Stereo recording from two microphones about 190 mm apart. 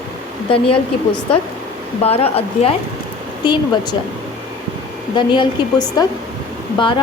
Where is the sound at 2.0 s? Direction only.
30° left (ahead or behind).